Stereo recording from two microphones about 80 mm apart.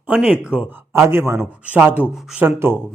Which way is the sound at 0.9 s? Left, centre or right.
Right.